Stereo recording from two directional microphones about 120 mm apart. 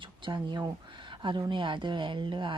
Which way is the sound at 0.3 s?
40° right (ahead or behind).